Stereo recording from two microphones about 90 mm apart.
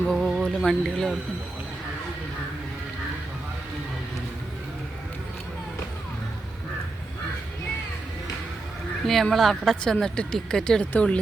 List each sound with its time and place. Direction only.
0.0 s speech: centre (ahead or behind)
9.0 s a woman's voice: centre (ahead or behind)